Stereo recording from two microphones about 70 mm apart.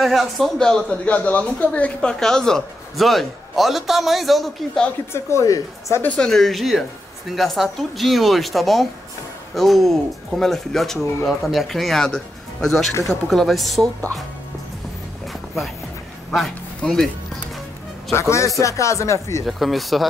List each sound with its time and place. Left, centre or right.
0.0 s speech: centre
1.0 s speech: left; by 4.8 s centre
5.1 s speech: left
6.1 s speech: centre
16.3 s a man's voice: centre
18.1 s speech: left
19.4 s speech: centre